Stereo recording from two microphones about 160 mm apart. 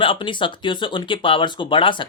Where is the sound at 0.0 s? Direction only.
30° left (ahead or behind).